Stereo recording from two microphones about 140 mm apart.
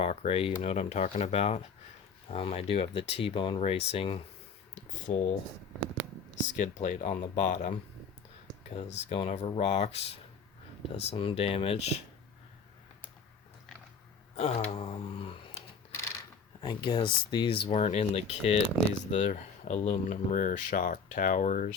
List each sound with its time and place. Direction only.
0.0 s speech: 45° left (ahead or behind)
6.5 s speech: 60° left (ahead or behind)
8.7 s speech: 45° left (ahead or behind)
14.3 s speech: 50° left (ahead or behind)
16.6 s speech: 35° left (ahead or behind)
17.7 s speech: 50° left (ahead or behind)
19.1 s speech: 65° left (ahead or behind)